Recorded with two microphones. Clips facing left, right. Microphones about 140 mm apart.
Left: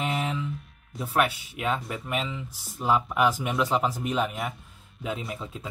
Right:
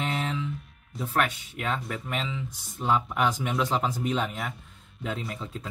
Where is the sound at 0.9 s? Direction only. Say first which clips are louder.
Left 2 dB; 5° left (ahead or behind).